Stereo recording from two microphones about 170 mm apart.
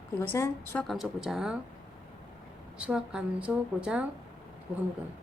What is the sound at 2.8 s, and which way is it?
A woman's voice, 5° right (ahead or behind).